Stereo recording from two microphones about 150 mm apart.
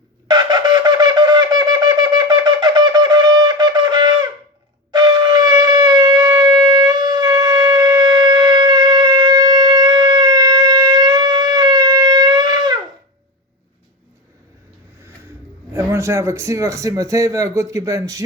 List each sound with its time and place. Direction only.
0.3 s wind instrument: 30° right (ahead or behind)
4.9 s shofar: 25° right (ahead or behind)
15.7 s a man's voice: 15° right (ahead or behind)